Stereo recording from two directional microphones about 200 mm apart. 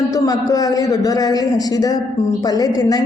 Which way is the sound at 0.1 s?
15° left (ahead or behind).